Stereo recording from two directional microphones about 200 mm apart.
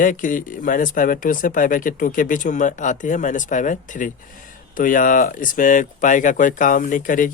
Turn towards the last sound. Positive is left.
turn(degrees=45)  # may be behind; listen again after turning